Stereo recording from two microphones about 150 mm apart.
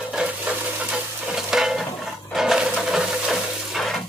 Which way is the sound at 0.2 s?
5° right (ahead or behind).